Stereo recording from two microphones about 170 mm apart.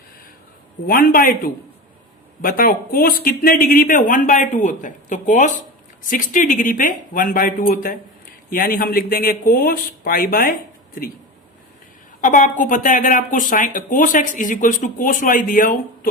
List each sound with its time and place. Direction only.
0.9 s speech: 55° left (ahead or behind)
2.4 s speech: 60° left (ahead or behind)
12.2 s speech: 50° left (ahead or behind)